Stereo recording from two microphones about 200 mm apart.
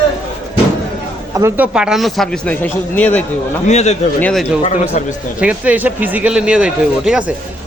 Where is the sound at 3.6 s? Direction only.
35° left (ahead or behind).